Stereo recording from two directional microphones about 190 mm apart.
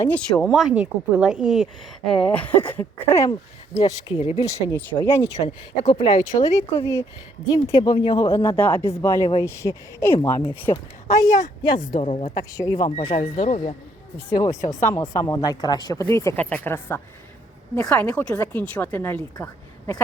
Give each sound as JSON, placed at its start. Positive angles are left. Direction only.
{"t": 0.0, "sound": "speech", "side_deg": 5}
{"t": 4.4, "sound": "speech", "side_deg": 15}
{"t": 5.9, "sound": "speech", "side_deg": 25}
{"t": 7.8, "sound": "speech", "side_deg": 25}
{"t": 13.0, "sound": "speech", "side_deg": 30}
{"t": 14.3, "sound": "speech", "side_deg": 20}